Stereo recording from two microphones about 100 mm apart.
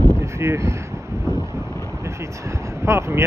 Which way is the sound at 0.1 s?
25° right (ahead or behind).